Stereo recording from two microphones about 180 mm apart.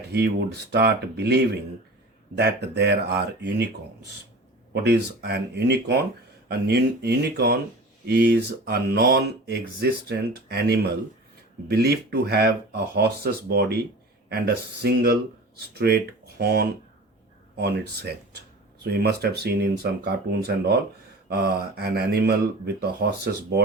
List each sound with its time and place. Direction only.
0.1 s speech: 65° right (ahead or behind)